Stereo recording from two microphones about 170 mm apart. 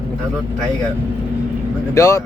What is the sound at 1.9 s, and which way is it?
Speech, 20° left (ahead or behind).